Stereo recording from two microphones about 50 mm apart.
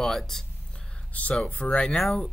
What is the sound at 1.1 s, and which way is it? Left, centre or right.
Speech, left.